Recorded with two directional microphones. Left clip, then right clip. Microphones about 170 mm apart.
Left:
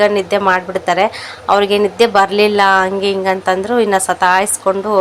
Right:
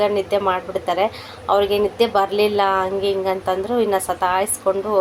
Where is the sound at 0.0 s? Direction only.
15° left (ahead or behind).